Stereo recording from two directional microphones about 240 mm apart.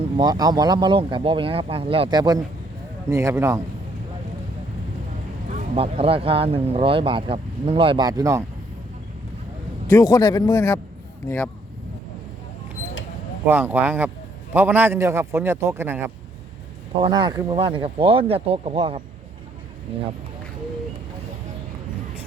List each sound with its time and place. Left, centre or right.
0.2 s a man's voice: centre
5.5 s speech: right
9.9 s speech: centre
13.5 s a man's voice: centre
17.0 s speech: centre